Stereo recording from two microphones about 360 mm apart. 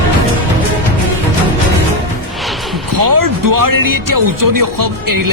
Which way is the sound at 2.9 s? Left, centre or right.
Right.